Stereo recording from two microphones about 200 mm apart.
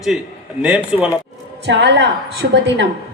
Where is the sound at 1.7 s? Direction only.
60° right (ahead or behind).